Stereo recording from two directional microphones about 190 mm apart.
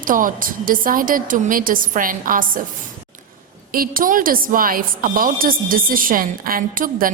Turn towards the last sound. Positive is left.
turn(degrees=-45)  # may be behind; listen again after turning